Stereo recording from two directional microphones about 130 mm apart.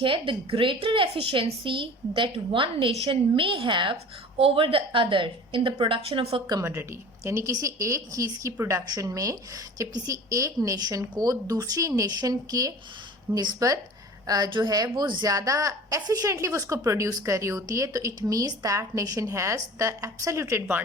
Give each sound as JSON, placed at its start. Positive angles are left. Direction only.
{"t": 0.0, "sound": "a woman's voice", "side_deg": -40}
{"t": 6.5, "sound": "a woman's voice", "side_deg": -25}